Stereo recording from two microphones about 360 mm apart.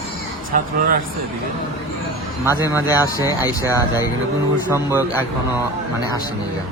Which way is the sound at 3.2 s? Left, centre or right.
Centre.